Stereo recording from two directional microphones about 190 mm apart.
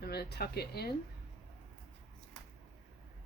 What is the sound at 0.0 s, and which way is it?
Speech, 55° left (ahead or behind).